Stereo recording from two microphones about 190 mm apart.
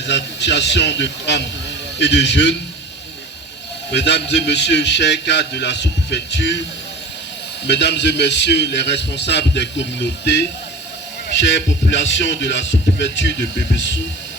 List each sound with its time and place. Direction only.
0.0 s a man's voice: 65° left (ahead or behind)
3.9 s a man's voice: 65° left (ahead or behind)
7.7 s a man's voice: 65° left (ahead or behind)